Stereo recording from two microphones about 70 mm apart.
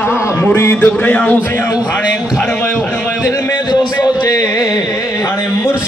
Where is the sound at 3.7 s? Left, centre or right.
Left.